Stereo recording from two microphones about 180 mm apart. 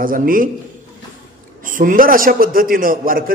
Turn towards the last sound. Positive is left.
turn(degrees=-50)  # may be behind; listen again after turning